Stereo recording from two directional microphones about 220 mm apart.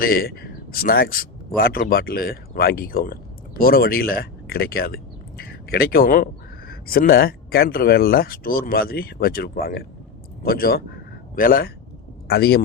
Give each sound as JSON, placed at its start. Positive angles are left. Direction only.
{"t": 0.0, "sound": "a man's voice", "side_deg": 40}